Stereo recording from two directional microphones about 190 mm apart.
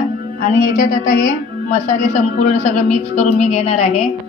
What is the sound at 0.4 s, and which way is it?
A woman's voice, 45° left (ahead or behind).